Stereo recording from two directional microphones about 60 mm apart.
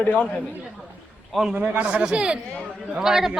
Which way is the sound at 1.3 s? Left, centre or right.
Centre.